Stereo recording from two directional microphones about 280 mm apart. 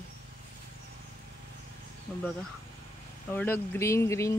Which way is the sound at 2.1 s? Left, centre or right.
Centre.